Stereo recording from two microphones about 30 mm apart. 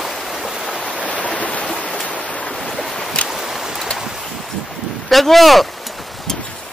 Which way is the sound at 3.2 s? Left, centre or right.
Centre.